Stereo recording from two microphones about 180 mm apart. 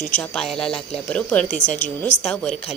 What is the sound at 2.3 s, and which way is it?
Speech, 5° left (ahead or behind).